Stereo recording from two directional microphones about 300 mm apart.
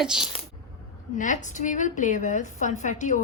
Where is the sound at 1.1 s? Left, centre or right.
Left.